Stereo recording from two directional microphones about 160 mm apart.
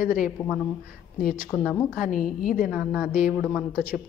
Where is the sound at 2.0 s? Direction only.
60° left (ahead or behind).